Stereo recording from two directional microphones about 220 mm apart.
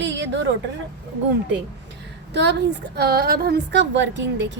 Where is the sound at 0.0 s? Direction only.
55° right (ahead or behind).